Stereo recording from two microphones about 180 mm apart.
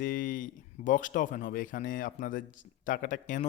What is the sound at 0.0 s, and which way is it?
Speech, 50° left (ahead or behind).